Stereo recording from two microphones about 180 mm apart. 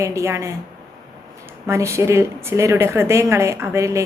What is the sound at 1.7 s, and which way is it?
A woman's voice, 15° right (ahead or behind).